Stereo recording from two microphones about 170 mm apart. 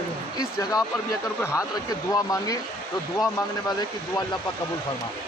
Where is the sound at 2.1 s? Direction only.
20° left (ahead or behind).